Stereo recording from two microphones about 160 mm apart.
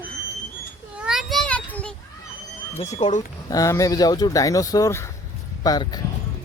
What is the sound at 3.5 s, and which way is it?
Speech, 20° left (ahead or behind).